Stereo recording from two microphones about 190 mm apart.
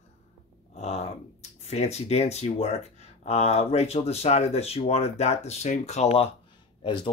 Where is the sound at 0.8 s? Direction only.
35° left (ahead or behind).